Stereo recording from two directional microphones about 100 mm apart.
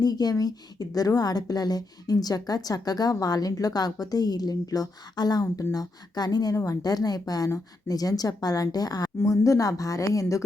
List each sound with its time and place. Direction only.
0.0 s a woman's voice: 40° left (ahead or behind)